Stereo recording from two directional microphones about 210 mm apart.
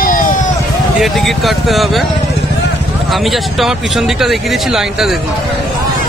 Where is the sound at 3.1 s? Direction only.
Centre (ahead or behind).